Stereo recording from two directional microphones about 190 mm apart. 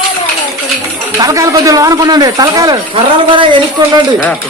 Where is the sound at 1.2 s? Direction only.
15° right (ahead or behind).